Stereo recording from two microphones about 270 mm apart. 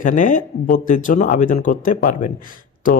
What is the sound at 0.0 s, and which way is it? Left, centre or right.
Speech, left.